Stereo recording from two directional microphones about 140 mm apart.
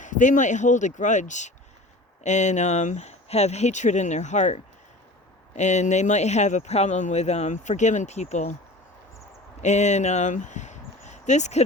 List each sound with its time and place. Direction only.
0.0 s speech: 65° left (ahead or behind)
9.6 s speech: 55° left (ahead or behind)